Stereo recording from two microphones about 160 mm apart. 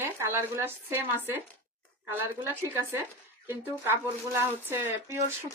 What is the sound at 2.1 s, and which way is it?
Speech, 15° right (ahead or behind).